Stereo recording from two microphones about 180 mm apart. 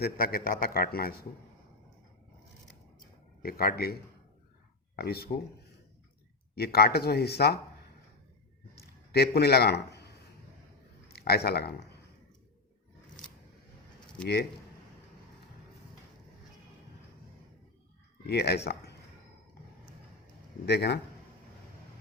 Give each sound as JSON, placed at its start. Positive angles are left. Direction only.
{"t": 0.0, "sound": "a man's voice", "side_deg": 55}
{"t": 3.4, "sound": "a man's voice", "side_deg": 55}
{"t": 6.6, "sound": "a man's voice", "side_deg": 60}
{"t": 9.1, "sound": "a man's voice", "side_deg": 60}
{"t": 11.1, "sound": "speech", "side_deg": 60}
{"t": 18.3, "sound": "speech", "side_deg": 65}
{"t": 20.7, "sound": "speech", "side_deg": 70}